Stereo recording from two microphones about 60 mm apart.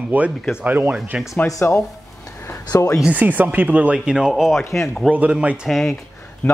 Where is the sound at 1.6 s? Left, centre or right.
Left.